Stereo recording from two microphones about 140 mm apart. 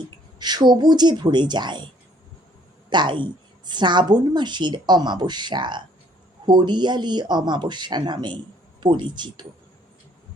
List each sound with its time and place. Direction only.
0.3 s a woman's voice: 30° right (ahead or behind)
2.9 s a woman's voice: 35° right (ahead or behind)